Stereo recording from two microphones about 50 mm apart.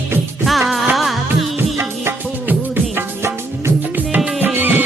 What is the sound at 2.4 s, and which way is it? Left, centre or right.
Music, right.